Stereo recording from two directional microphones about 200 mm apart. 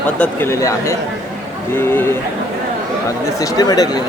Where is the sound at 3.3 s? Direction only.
15° left (ahead or behind).